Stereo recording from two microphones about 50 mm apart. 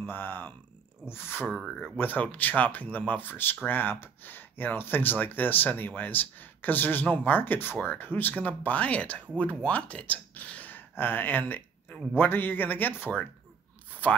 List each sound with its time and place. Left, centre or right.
0.0 s speech: left
2.0 s speech: left
8.4 s speech: left